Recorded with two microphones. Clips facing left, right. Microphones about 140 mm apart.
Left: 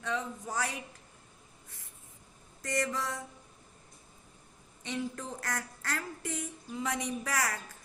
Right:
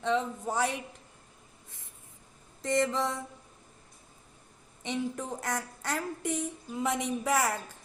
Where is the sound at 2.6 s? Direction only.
25° right (ahead or behind).